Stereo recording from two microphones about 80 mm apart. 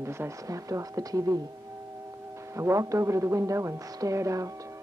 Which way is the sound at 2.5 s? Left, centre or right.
Right.